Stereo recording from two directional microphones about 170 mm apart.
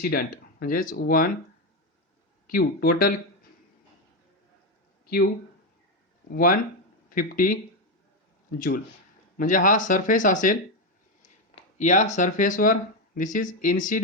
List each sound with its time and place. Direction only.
0.0 s speech: 60° left (ahead or behind)
2.5 s speech: 60° left (ahead or behind)
6.3 s speech: 55° left (ahead or behind)